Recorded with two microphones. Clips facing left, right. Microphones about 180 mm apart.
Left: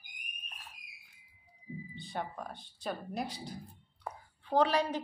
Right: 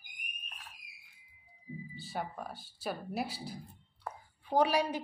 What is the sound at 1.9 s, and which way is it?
A woman's voice, 5° right (ahead or behind).